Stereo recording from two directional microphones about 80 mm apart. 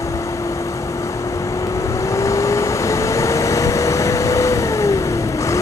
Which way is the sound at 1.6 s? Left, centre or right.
Left.